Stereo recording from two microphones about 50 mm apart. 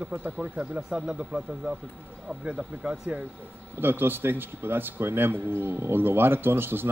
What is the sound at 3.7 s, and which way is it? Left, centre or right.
Speech, right.